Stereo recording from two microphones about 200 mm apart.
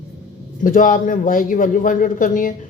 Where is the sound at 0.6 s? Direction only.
40° left (ahead or behind).